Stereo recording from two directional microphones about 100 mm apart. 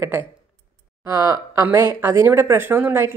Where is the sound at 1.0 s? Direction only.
35° right (ahead or behind).